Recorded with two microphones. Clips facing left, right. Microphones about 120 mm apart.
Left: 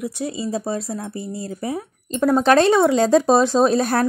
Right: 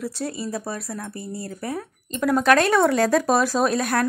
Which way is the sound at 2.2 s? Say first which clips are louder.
Left 3 dB; 30° left (ahead or behind).